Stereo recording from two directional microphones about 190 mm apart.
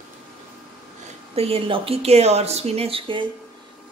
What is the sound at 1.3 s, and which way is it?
A woman's voice, 30° right (ahead or behind).